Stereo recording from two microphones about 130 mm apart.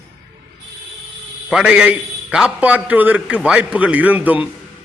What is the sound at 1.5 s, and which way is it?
A man's voice, 5° right (ahead or behind).